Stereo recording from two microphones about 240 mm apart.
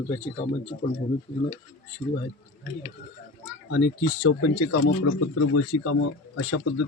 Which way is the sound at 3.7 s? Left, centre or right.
Left.